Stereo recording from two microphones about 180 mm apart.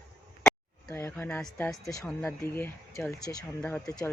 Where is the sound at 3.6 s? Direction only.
10° left (ahead or behind).